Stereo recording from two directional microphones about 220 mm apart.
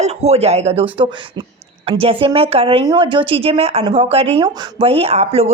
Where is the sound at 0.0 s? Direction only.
30° right (ahead or behind).